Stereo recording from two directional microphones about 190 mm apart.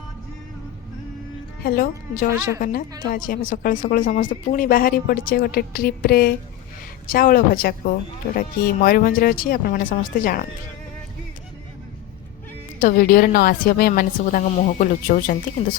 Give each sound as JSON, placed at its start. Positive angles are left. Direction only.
{"t": 1.6, "sound": "speech", "side_deg": 50}
{"t": 12.8, "sound": "speech", "side_deg": 50}